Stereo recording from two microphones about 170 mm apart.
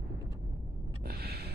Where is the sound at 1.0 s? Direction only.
65° right (ahead or behind).